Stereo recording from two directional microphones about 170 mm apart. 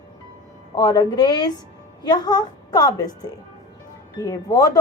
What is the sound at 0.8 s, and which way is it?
A woman's voice, 25° left (ahead or behind).